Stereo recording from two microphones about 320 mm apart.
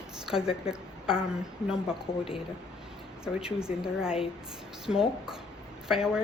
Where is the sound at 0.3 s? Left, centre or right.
Centre.